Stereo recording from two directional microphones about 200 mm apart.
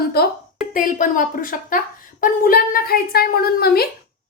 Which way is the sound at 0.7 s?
40° left (ahead or behind).